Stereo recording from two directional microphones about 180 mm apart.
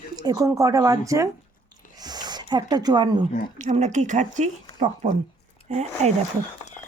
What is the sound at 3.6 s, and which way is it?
Speech, 40° right (ahead or behind).